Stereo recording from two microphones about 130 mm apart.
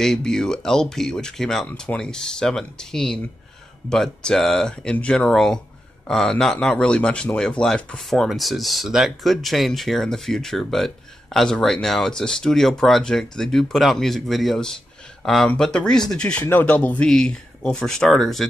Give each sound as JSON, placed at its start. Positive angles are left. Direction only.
{"t": 0.0, "sound": "a man's voice", "side_deg": 5}